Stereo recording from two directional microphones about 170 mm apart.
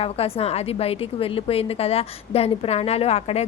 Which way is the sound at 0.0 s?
35° left (ahead or behind).